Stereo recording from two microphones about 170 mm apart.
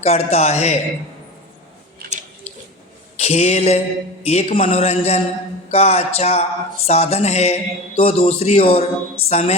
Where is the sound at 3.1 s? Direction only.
40° left (ahead or behind).